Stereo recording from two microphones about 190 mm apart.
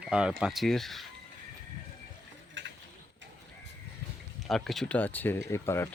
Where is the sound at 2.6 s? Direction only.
70° right (ahead or behind).